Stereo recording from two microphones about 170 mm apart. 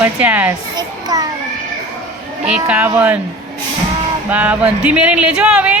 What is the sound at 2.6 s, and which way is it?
Speech, 10° right (ahead or behind).